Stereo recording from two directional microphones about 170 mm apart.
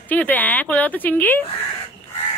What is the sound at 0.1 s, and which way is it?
Speech, 10° left (ahead or behind).